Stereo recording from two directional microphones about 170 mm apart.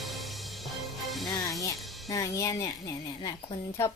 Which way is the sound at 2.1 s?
20° left (ahead or behind).